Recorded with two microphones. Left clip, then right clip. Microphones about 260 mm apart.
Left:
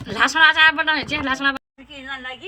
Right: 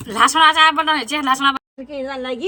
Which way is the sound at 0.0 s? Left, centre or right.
Centre.